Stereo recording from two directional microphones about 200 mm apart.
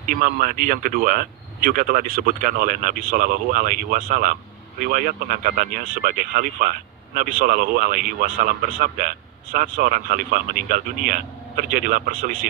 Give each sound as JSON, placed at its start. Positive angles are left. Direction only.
{"t": 0.1, "sound": "speech", "side_deg": -45}